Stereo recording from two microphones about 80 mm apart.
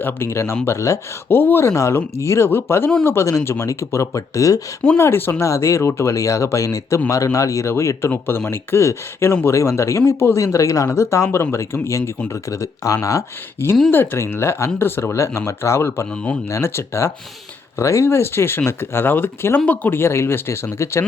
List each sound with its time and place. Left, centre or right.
0.0 s speech: left
4.9 s speech: left